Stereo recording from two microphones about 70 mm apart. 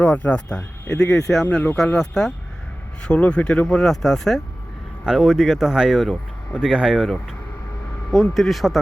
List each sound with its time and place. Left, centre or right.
0.0 s speech: centre
0.9 s speech: left
1.1 s speech: centre
5.0 s speech: centre